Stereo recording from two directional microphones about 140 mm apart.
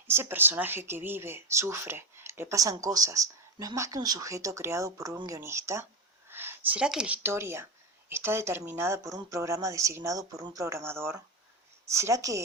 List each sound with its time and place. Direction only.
0.1 s speech: 15° right (ahead or behind)